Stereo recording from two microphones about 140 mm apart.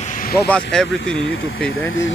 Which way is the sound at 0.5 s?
5° left (ahead or behind).